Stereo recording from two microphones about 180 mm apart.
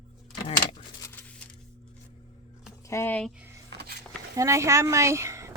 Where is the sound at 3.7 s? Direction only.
65° right (ahead or behind).